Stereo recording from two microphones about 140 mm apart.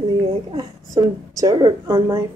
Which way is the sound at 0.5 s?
35° right (ahead or behind).